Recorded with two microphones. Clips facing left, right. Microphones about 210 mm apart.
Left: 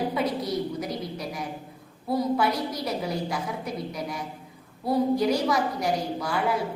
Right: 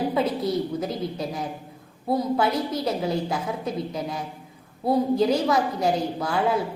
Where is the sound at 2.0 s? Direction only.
25° right (ahead or behind).